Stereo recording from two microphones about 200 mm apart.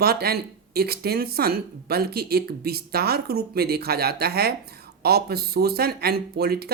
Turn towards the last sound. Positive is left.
turn(degrees=-50)  # may be behind; listen again after turning